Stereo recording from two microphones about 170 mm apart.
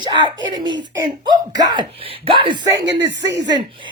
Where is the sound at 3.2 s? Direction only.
90° right.